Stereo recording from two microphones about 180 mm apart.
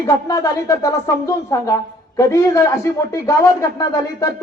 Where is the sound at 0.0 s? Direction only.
20° left (ahead or behind).